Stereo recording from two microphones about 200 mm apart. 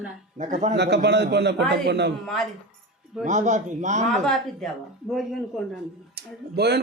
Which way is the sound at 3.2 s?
35° right (ahead or behind).